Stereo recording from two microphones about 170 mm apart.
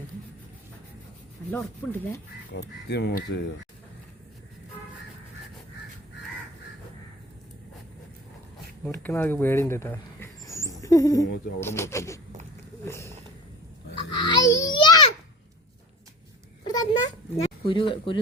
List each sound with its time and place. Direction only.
1.5 s speech: 10° left (ahead or behind)
2.5 s speech: 70° left (ahead or behind)
8.8 s speech: 10° left (ahead or behind)
14.2 s a sound: 25° left (ahead or behind)
16.6 s cat: 25° left (ahead or behind)
17.3 s speech: 30° left (ahead or behind)